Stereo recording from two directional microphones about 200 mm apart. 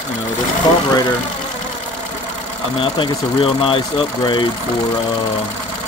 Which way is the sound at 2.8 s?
25° left (ahead or behind).